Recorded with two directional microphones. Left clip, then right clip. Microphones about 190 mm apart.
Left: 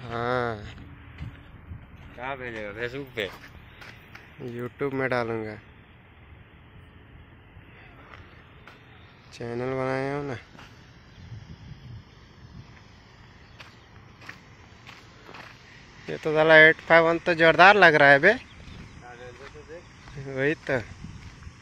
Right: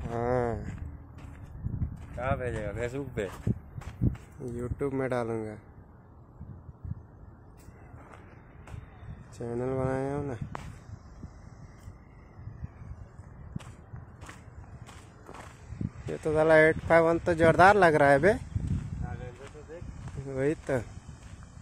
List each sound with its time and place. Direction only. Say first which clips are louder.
0.0 s a sound: left 2 dB; 5° right (ahead or behind)
0.3 s a sound: left 2 dB; 20° right (ahead or behind)
2.4 s speech: left 1 dB; 55° right (ahead or behind)
4.5 s speech: left 3 dB; 5° right (ahead or behind)
9.4 s speech: left 2 dB; centre (ahead or behind)
16.1 s speech: left 3 dB; 15° left (ahead or behind)
16.3 s speech: left 6 dB; centre (ahead or behind)
20.2 s speech: left 4 dB; centre (ahead or behind)